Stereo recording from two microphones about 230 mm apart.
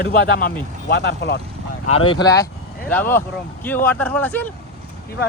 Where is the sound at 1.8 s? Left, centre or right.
Left; by 4.5 s centre.